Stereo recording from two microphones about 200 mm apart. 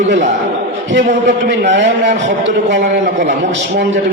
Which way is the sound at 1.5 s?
60° right (ahead or behind).